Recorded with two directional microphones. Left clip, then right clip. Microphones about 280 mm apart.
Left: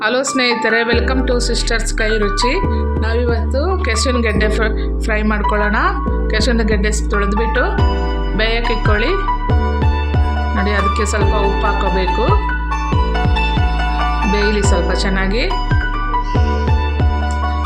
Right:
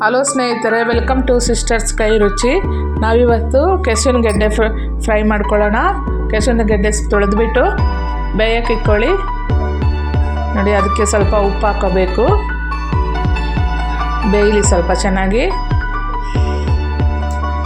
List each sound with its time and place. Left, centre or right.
0.0 s a woman's voice: centre
10.5 s a woman's voice: centre
14.3 s a woman's voice: centre